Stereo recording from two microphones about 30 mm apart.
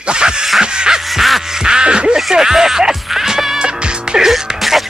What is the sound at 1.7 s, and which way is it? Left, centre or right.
Music, right.